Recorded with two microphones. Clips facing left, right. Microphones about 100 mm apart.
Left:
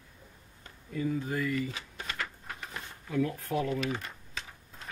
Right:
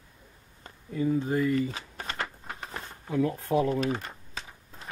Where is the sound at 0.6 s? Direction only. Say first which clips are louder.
Right 5 dB; 25° right (ahead or behind).